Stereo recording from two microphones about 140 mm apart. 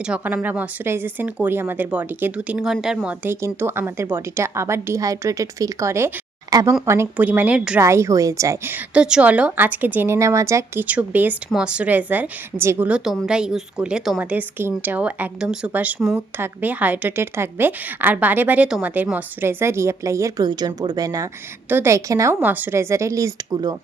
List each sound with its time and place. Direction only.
0.0 s a woman's voice: 5° right (ahead or behind)
7.8 s a woman's voice: 20° right (ahead or behind)
12.9 s a woman's voice: 5° right (ahead or behind); by 23.6 s 20° right (ahead or behind)